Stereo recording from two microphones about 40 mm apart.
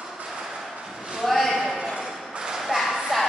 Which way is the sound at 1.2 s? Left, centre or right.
Centre.